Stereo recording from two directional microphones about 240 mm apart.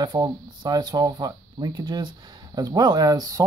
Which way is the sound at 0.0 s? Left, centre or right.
Centre.